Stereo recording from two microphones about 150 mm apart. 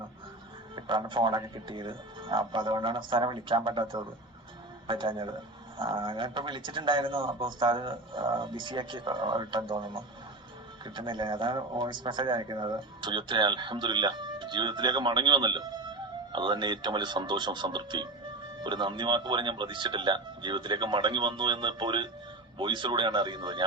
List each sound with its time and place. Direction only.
0.8 s speech: 30° right (ahead or behind)